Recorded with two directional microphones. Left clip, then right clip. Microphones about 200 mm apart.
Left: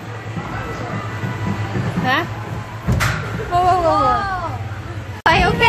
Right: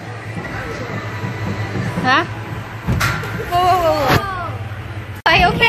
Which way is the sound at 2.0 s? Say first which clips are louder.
Right 4 dB; 5° right (ahead or behind).